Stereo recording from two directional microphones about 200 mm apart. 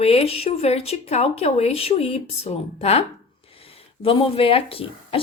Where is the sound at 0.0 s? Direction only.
30° left (ahead or behind).